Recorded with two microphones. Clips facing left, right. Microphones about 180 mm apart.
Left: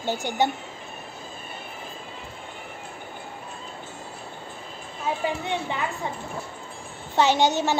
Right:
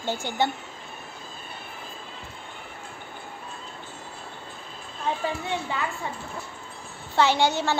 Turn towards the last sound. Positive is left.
turn(degrees=15)  # may be behind; listen again after turning